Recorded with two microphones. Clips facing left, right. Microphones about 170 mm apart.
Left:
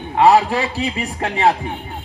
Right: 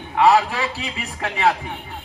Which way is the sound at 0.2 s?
30° left (ahead or behind).